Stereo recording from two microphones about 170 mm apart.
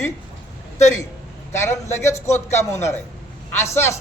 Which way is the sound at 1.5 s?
15° left (ahead or behind).